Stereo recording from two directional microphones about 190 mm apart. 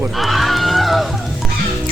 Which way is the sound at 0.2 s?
Centre (ahead or behind).